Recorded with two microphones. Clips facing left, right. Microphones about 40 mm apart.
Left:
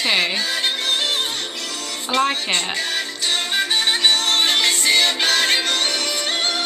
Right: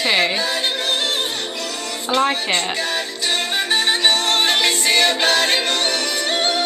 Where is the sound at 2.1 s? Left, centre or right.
Centre.